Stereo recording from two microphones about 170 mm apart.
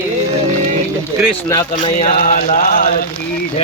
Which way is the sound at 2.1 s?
60° left (ahead or behind).